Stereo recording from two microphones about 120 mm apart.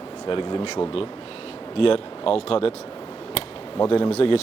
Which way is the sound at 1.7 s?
50° left (ahead or behind).